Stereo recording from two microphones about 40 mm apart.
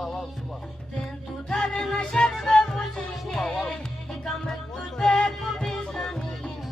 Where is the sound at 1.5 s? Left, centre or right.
Left.